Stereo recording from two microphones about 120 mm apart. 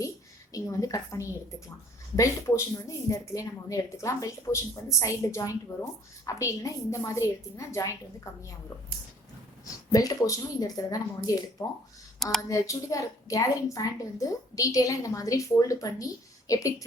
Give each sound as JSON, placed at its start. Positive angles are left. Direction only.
{"t": 0.5, "sound": "a woman's voice", "side_deg": 25}
{"t": 9.9, "sound": "speech", "side_deg": 30}
{"t": 12.5, "sound": "a woman's voice", "side_deg": 25}